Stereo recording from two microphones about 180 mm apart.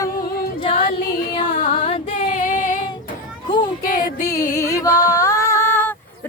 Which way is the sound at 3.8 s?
50° left (ahead or behind).